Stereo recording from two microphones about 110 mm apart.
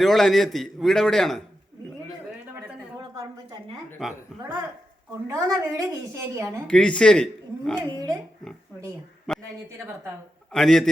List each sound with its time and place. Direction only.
0.0 s a man's voice: 5° left (ahead or behind)
4.0 s a man's voice: centre (ahead or behind)
5.3 s a woman's voice: 30° right (ahead or behind)
6.7 s speech: 10° left (ahead or behind)
7.8 s a woman's voice: 35° right (ahead or behind)
9.3 s a sound: 10° left (ahead or behind)
10.5 s a man's voice: 5° left (ahead or behind)